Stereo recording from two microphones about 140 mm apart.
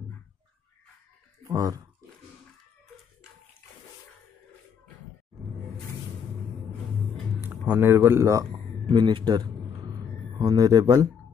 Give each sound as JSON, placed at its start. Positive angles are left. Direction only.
{"t": 1.4, "sound": "speech", "side_deg": -25}
{"t": 7.6, "sound": "speech", "side_deg": -15}
{"t": 8.8, "sound": "a sound", "side_deg": -35}